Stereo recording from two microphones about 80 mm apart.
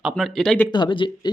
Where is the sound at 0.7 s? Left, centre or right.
Left.